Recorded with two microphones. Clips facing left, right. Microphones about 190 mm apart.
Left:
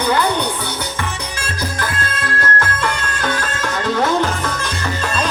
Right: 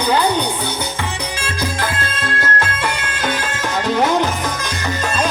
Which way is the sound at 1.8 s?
20° right (ahead or behind).